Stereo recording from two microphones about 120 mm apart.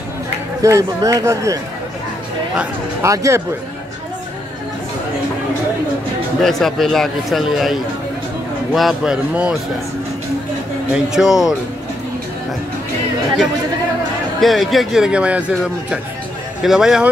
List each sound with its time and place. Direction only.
0.6 s speech: 25° right (ahead or behind)
3.0 s speech: 25° right (ahead or behind)
6.4 s speech: centre (ahead or behind)
10.9 s speech: 5° right (ahead or behind)
14.4 s speech: centre (ahead or behind)